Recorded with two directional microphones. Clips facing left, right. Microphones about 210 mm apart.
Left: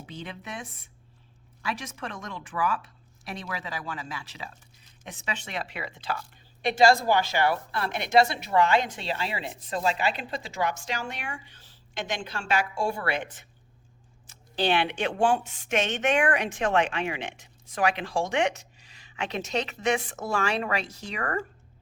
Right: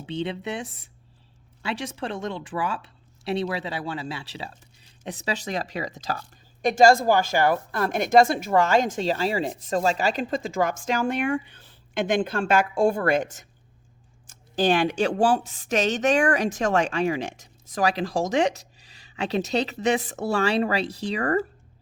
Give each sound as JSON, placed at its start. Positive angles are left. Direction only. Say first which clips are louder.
{"t": 0.0, "sound": "a woman's voice", "louder": "right 10 dB", "side_deg": -30}